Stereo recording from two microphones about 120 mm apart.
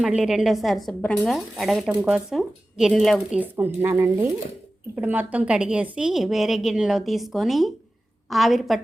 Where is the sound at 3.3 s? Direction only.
15° right (ahead or behind); by 8.8 s centre (ahead or behind).